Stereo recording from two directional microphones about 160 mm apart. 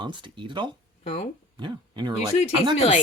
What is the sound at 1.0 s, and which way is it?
Speech, 45° left (ahead or behind).